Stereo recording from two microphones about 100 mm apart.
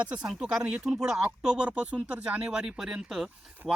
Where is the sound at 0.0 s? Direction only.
10° right (ahead or behind).